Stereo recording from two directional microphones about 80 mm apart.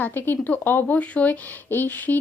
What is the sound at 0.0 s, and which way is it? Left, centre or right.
Speech, left.